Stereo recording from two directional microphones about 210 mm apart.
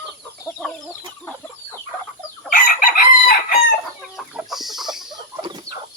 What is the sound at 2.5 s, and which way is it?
Chicken, 40° left (ahead or behind).